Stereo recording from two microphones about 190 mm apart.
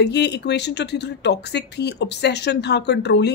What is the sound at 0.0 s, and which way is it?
A woman's voice, 60° left (ahead or behind).